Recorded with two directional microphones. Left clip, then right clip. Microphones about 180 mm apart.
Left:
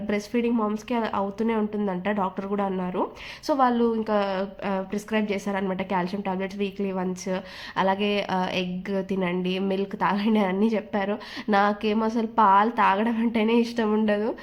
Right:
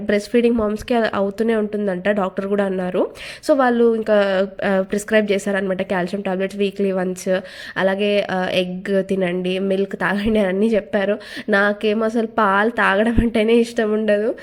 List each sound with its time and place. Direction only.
0.3 s speech: 30° right (ahead or behind)